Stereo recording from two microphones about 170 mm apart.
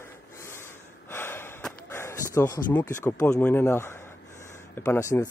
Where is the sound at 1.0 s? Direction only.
15° left (ahead or behind).